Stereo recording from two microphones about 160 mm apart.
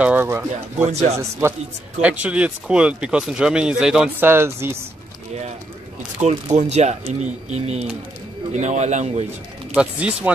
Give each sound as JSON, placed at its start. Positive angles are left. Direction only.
{"t": 0.0, "sound": "speech", "side_deg": -10}
{"t": 0.8, "sound": "speech", "side_deg": -45}
{"t": 2.0, "sound": "speech", "side_deg": -10}
{"t": 4.3, "sound": "speech", "side_deg": -15}
{"t": 6.2, "sound": "speech", "side_deg": -45}
{"t": 9.8, "sound": "speech", "side_deg": -10}